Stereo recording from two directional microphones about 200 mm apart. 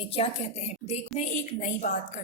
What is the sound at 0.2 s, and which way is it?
A woman's voice, 30° left (ahead or behind).